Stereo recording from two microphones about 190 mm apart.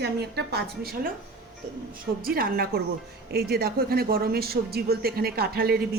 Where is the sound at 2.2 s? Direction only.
50° right (ahead or behind).